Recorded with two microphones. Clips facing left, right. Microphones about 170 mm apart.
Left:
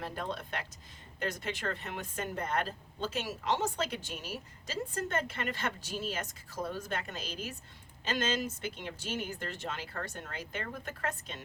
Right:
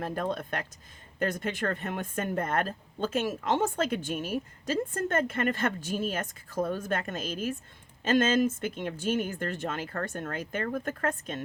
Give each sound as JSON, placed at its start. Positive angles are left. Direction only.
{"t": 0.0, "sound": "speech", "side_deg": -45}